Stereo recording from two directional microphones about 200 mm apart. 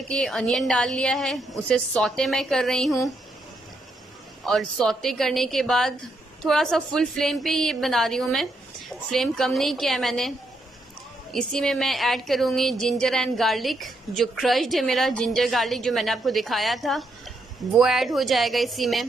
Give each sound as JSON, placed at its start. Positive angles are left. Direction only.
{"t": 0.1, "sound": "a woman's voice", "side_deg": 0}
{"t": 4.5, "sound": "a woman's voice", "side_deg": 0}
{"t": 11.3, "sound": "a woman's voice", "side_deg": 5}